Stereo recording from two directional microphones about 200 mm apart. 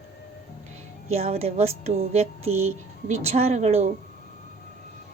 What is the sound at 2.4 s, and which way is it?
Music, 90° right.